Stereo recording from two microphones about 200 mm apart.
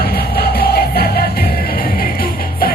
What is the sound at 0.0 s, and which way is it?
Music, 50° left (ahead or behind).